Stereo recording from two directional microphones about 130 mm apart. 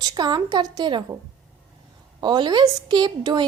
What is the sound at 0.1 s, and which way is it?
Speech, 30° right (ahead or behind).